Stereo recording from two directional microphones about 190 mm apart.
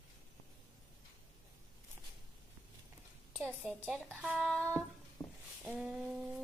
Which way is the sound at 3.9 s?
5° left (ahead or behind).